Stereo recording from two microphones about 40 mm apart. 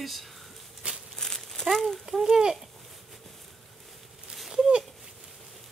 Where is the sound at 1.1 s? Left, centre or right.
Centre.